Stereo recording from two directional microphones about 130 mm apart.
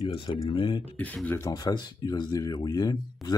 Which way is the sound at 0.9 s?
10° left (ahead or behind).